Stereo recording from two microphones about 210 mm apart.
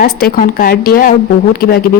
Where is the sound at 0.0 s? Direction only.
45° left (ahead or behind).